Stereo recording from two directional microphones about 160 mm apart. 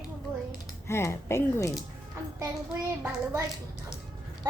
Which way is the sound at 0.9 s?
15° left (ahead or behind).